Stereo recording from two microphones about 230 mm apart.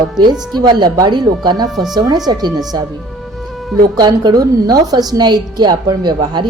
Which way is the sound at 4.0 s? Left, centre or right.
Centre.